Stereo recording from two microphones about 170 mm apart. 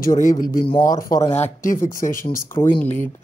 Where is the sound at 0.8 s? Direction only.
20° left (ahead or behind).